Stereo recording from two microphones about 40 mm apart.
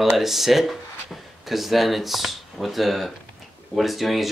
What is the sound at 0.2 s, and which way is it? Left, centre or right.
Speech, centre.